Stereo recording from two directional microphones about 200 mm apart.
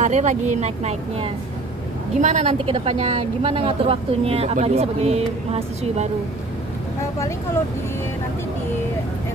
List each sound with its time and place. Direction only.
0.0 s a woman's voice: 35° right (ahead or behind)